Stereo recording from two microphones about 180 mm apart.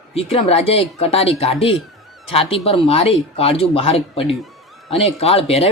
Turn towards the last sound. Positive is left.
turn(degrees=35)  # may be behind; listen again after turning